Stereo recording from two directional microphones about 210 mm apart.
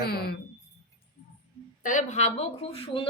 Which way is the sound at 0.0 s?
50° left (ahead or behind).